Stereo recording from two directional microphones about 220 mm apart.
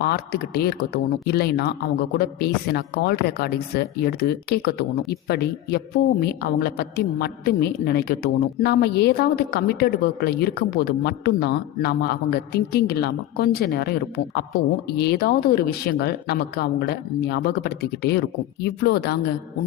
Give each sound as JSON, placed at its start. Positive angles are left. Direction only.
{"t": 0.0, "sound": "a woman's voice", "side_deg": 45}
{"t": 14.8, "sound": "a woman's voice", "side_deg": 45}